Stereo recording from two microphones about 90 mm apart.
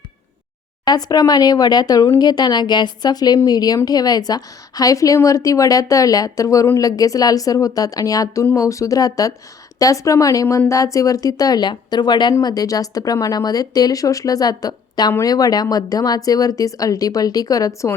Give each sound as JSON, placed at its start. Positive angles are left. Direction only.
{"t": 0.9, "sound": "a woman's voice", "side_deg": 45}